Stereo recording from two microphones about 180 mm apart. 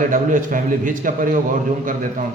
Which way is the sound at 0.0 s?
50° right (ahead or behind).